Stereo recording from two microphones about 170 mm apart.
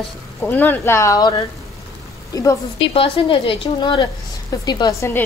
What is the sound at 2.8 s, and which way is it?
A woman's voice, 30° left (ahead or behind).